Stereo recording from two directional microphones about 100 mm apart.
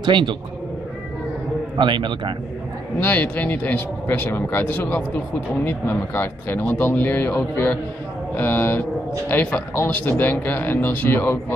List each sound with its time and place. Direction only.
0.0 s a man's voice: 55° right (ahead or behind)
1.8 s a man's voice: 55° right (ahead or behind)
3.0 s speech: 20° left (ahead or behind)